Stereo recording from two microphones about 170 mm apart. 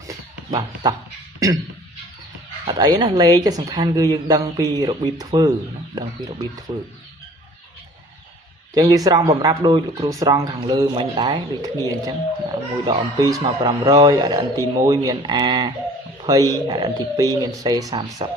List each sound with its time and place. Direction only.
0.5 s a woman's voice: 20° right (ahead or behind)
1.4 s throat clearing: 20° right (ahead or behind)
2.6 s a woman's voice: 25° right (ahead or behind)
8.7 s a woman's voice: 25° right (ahead or behind)